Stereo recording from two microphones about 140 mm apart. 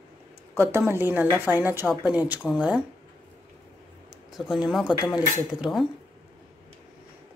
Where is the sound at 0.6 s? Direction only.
20° right (ahead or behind).